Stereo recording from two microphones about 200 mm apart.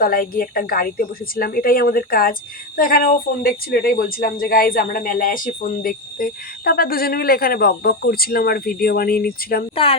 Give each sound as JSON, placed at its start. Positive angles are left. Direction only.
{"t": 0.0, "sound": "speech", "side_deg": 45}
{"t": 9.7, "sound": "speech", "side_deg": 30}